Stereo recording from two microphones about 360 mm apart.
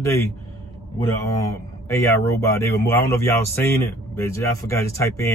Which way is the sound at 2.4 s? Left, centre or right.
Centre.